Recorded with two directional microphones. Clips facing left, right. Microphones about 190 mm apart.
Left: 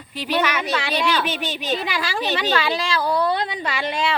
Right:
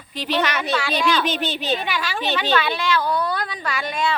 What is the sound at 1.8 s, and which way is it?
A woman's voice, 35° left (ahead or behind).